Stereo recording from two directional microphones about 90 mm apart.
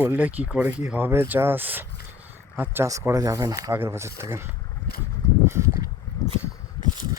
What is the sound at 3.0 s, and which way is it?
Speech, 35° right (ahead or behind).